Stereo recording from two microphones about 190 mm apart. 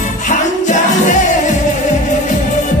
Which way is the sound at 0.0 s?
40° left (ahead or behind).